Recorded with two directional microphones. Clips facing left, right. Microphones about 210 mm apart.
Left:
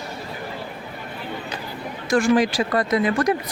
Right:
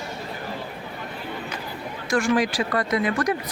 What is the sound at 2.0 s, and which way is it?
Speech, 30° left (ahead or behind).